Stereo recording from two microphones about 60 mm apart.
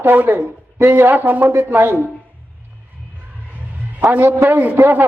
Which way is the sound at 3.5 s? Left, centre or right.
Right.